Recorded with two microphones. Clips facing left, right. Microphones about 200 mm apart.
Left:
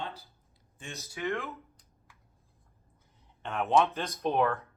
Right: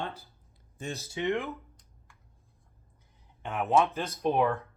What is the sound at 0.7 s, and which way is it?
Speech, 35° right (ahead or behind).